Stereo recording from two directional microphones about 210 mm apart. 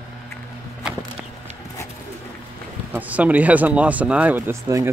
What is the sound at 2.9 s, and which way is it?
Speech, 5° right (ahead or behind).